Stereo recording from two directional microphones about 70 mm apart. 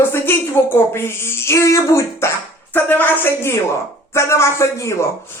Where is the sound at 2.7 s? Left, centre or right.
Left.